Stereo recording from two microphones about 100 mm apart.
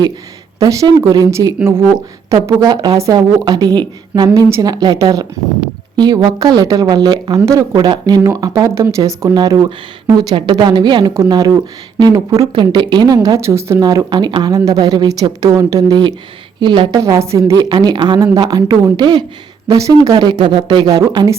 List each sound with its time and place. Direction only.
0.6 s a woman's voice: 35° right (ahead or behind)
4.4 s speech: 25° right (ahead or behind)
4.6 s speech: 45° right (ahead or behind)
7.4 s a woman's voice: 30° right (ahead or behind)
7.8 s a woman's voice: 45° right (ahead or behind)
12.5 s speech: 50° right (ahead or behind)
13.2 s speech: 30° right (ahead or behind)
13.8 s speech: 45° right (ahead or behind)
14.5 s a woman's voice: 35° right (ahead or behind)
16.6 s speech: 50° right (ahead or behind)
16.9 s a woman's voice: 35° right (ahead or behind)
19.6 s a woman's voice: 35° right (ahead or behind)
20.1 s speech: 50° right (ahead or behind)